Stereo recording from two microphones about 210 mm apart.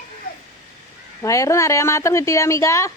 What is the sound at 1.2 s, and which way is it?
A woman's voice, 15° left (ahead or behind).